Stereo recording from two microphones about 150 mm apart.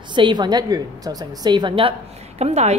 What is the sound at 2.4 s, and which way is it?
Speech, 45° right (ahead or behind).